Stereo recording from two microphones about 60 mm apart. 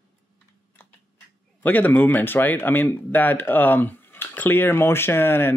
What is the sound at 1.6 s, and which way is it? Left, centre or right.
Speech, left.